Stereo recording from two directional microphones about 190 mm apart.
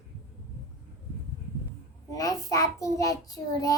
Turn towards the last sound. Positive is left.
turn(degrees=20)  # may be behind; listen again after turning